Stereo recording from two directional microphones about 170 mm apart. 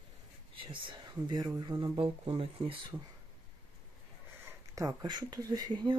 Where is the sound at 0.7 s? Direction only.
25° right (ahead or behind).